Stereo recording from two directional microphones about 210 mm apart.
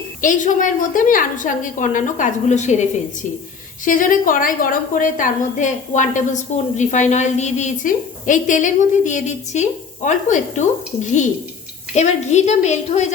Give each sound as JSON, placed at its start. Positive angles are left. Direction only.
{"t": 0.2, "sound": "a woman's voice", "side_deg": 40}
{"t": 3.8, "sound": "a woman's voice", "side_deg": 40}